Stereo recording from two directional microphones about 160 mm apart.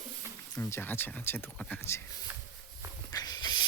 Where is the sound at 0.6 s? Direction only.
15° left (ahead or behind).